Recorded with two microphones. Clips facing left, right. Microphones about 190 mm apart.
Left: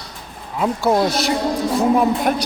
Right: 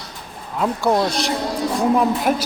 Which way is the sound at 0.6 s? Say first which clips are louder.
Left 1 dB; centre (ahead or behind).